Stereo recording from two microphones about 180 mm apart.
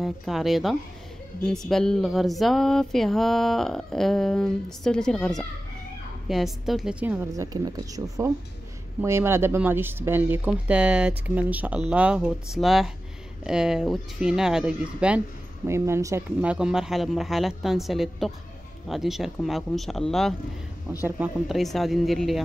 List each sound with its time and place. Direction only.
0.0 s speech: centre (ahead or behind)
7.4 s speech: 20° right (ahead or behind); by 20.3 s centre (ahead or behind)
21.0 s speech: 10° right (ahead or behind)
21.5 s speech: centre (ahead or behind)